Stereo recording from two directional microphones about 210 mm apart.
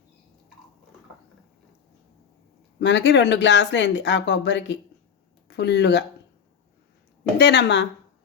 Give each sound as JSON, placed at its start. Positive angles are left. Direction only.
{"t": 2.8, "sound": "speech", "side_deg": 55}
{"t": 7.3, "sound": "speech", "side_deg": 55}